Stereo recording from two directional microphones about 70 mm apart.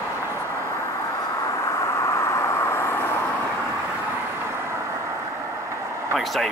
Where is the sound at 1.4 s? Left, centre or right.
Left.